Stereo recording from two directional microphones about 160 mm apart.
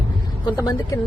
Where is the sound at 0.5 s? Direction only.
20° left (ahead or behind).